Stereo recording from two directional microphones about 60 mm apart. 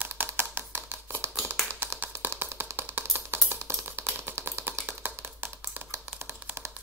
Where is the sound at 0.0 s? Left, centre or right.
Right.